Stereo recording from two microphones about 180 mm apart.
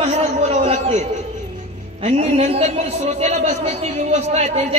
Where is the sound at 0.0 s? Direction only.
35° right (ahead or behind).